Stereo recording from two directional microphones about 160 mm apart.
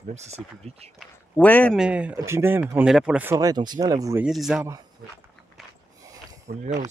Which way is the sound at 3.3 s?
25° right (ahead or behind).